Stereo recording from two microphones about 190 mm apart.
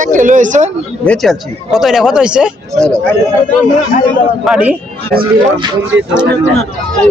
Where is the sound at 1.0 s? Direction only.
5° left (ahead or behind).